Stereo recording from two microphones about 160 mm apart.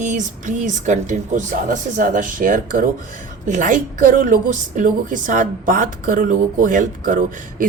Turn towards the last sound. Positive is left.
turn(degrees=-55)  # may be behind; listen again after turning